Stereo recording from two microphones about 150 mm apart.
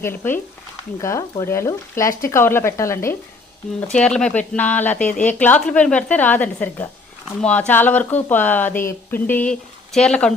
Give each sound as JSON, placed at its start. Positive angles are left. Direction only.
{"t": 0.0, "sound": "speech", "side_deg": 15}
{"t": 3.8, "sound": "speech", "side_deg": 5}